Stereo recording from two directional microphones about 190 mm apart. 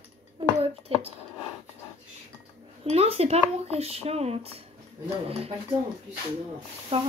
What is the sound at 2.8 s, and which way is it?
Speech, 30° right (ahead or behind).